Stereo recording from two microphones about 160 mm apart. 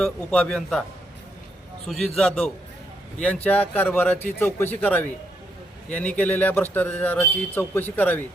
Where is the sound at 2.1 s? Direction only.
5° left (ahead or behind).